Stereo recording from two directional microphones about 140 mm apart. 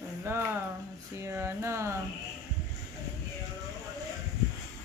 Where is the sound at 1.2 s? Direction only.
20° right (ahead or behind).